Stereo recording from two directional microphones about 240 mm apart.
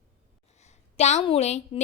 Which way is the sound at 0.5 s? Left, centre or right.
Left.